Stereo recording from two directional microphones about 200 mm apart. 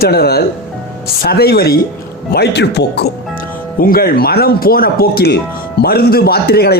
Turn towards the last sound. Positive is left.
turn(degrees=50)  # may be behind; listen again after turning